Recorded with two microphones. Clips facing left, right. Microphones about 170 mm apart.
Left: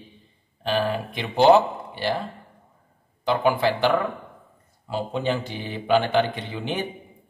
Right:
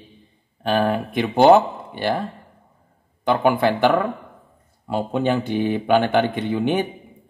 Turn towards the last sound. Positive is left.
turn(degrees=-55)  # may be behind; listen again after turning